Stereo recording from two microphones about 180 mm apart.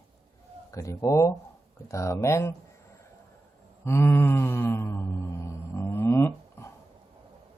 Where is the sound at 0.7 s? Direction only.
15° left (ahead or behind).